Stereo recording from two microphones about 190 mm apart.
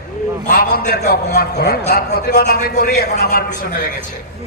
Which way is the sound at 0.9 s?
55° left (ahead or behind).